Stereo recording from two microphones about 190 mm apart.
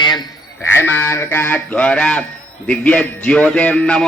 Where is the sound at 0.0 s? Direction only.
20° left (ahead or behind).